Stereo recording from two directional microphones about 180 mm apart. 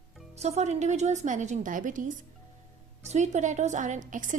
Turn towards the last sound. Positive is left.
turn(degrees=-45)  # may be behind; listen again after turning